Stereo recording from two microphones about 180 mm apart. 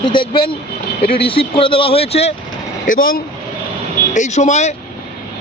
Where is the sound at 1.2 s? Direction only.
30° left (ahead or behind).